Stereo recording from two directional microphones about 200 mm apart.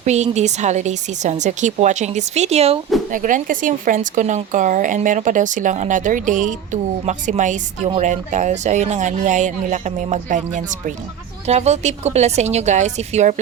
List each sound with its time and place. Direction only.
0.0 s speech: 35° right (ahead or behind)